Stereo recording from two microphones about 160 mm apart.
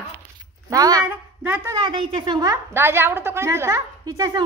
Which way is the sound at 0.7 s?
25° right (ahead or behind).